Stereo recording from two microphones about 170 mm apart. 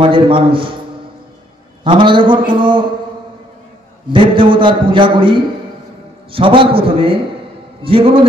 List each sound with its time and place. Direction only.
0.0 s a man's voice: 30° right (ahead or behind)
1.9 s a man's voice: 30° right (ahead or behind)
4.1 s a man's voice: 30° right (ahead or behind)